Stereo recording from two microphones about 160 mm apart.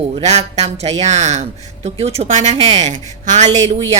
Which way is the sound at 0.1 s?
45° right (ahead or behind).